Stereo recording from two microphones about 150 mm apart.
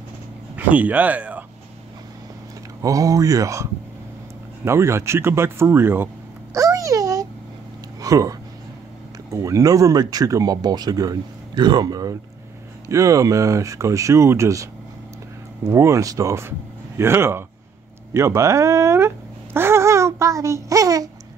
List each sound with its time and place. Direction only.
0.6 s speech: 10° right (ahead or behind)
2.8 s speech: 20° right (ahead or behind)
4.6 s speech: 20° right (ahead or behind)
6.5 s a sound: 20° right (ahead or behind)
8.0 s speech: 20° right (ahead or behind)
15.7 s speech: 20° right (ahead or behind)
18.1 s a sound: 20° right (ahead or behind)